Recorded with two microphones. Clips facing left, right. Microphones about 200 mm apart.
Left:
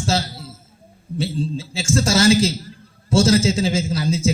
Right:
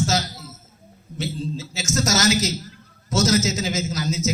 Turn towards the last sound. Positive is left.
turn(degrees=30)  # may be behind; listen again after turning